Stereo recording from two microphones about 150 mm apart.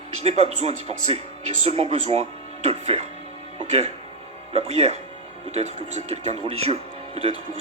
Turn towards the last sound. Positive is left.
turn(degrees=-40)  # may be behind; listen again after turning